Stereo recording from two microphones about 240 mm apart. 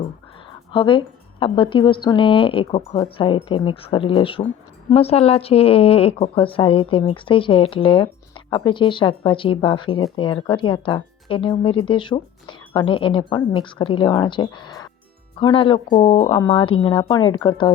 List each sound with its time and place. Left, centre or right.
0.7 s speech: left